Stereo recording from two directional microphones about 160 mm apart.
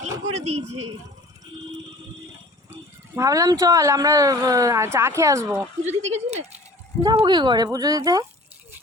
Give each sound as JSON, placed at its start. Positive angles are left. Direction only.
{"t": 0.0, "sound": "speech", "side_deg": -45}
{"t": 3.2, "sound": "speech", "side_deg": -20}
{"t": 5.9, "sound": "speech", "side_deg": -45}
{"t": 7.0, "sound": "speech", "side_deg": -25}